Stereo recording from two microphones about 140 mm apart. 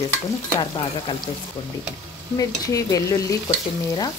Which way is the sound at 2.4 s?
25° left (ahead or behind).